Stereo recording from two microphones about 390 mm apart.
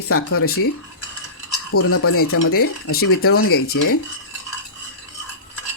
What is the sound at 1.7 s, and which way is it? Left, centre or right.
Speech, left.